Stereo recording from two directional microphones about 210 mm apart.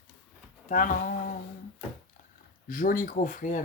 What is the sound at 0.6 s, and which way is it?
Speech, 40° left (ahead or behind).